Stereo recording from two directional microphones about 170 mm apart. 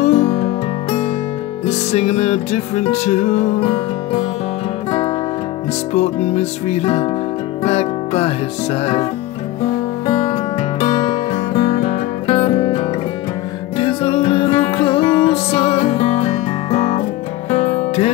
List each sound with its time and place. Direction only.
0.0 s music: 45° left (ahead or behind)
1.7 s music: 40° left (ahead or behind)
5.9 s music: 40° left (ahead or behind)
10.0 s music: 35° left (ahead or behind)